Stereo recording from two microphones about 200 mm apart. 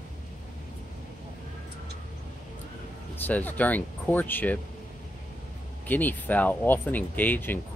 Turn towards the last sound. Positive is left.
turn(degrees=10)  # may be behind; listen again after turning